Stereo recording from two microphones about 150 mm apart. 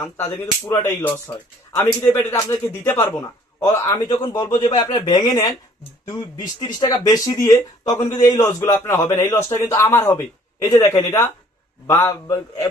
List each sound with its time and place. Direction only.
0.0 s speech: 20° left (ahead or behind)